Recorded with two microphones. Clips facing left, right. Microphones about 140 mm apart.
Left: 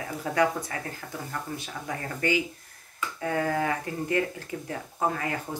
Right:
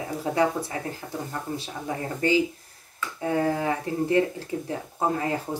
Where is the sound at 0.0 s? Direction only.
25° right (ahead or behind).